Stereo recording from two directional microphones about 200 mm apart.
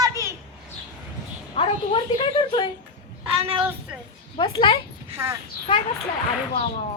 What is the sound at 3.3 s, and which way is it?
Speech, 30° right (ahead or behind).